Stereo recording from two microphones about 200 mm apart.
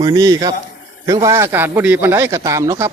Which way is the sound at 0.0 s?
20° right (ahead or behind).